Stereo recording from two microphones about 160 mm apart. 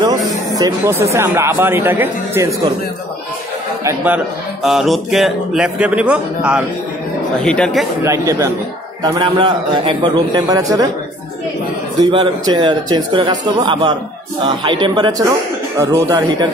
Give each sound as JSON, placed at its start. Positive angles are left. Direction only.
{"t": 0.6, "sound": "speech", "side_deg": -20}
{"t": 3.8, "sound": "speech", "side_deg": -10}
{"t": 7.4, "sound": "speech", "side_deg": 5}
{"t": 8.0, "sound": "speech", "side_deg": -20}
{"t": 12.0, "sound": "speech", "side_deg": -25}